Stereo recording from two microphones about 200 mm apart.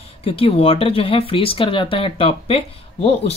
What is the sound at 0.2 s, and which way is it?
Speech, 30° left (ahead or behind).